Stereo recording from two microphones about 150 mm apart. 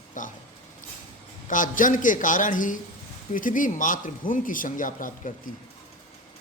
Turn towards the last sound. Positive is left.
turn(degrees=60)  # may be behind; listen again after turning